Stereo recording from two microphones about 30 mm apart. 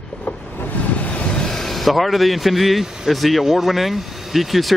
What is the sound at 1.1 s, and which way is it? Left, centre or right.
Vehicle, left.